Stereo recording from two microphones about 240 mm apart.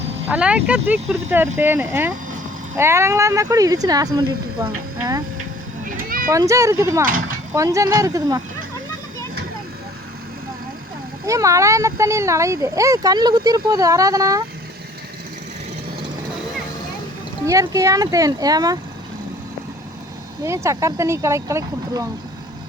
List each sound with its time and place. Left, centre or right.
0.3 s speech: centre
5.8 s cat: right
6.3 s speech: centre
7.0 s speech: right
7.5 s speech: centre
11.3 s speech: centre
17.4 s speech: centre
20.4 s speech: centre